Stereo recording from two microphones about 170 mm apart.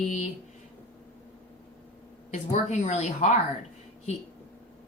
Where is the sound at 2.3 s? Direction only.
45° left (ahead or behind).